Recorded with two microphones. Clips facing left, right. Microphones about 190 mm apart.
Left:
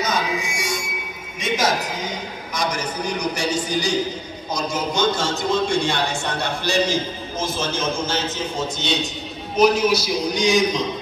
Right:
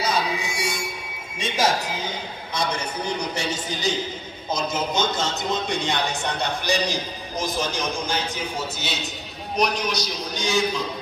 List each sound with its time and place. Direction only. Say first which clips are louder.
0.0 s a sound: left 1 dB; 30° right (ahead or behind)
1.4 s music: left 1 dB; 30° right (ahead or behind)
2.7 s a man's voice: left 2 dB; 25° right (ahead or behind); by 9.0 s 5° right (ahead or behind)
9.6 s a man's voice: left 8 dB; 5° left (ahead or behind)